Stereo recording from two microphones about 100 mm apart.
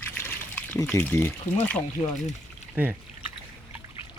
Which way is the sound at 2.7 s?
20° right (ahead or behind).